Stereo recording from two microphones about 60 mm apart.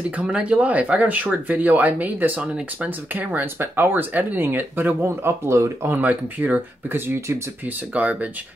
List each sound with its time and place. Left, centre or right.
0.2 s speech: centre; by 5.9 s right
5.9 s speech: right
6.9 s speech: right
7.9 s speech: right